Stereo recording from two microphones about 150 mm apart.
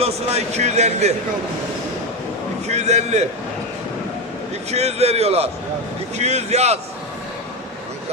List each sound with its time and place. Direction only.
0.0 s a man's voice: 45° right (ahead or behind)
2.6 s a man's voice: 50° right (ahead or behind)
4.7 s a man's voice: 45° right (ahead or behind)